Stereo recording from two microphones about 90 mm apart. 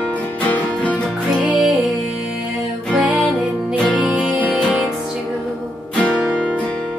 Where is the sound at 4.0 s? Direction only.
15° right (ahead or behind).